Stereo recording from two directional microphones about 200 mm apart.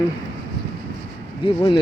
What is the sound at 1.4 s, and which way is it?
Speech, 25° left (ahead or behind).